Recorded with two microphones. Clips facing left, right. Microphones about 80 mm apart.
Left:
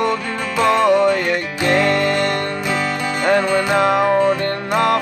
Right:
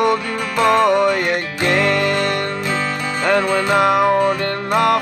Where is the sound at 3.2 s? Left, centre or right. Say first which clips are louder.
Even; right.